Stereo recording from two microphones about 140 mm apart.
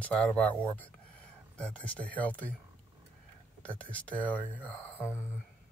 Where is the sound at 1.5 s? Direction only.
10° left (ahead or behind).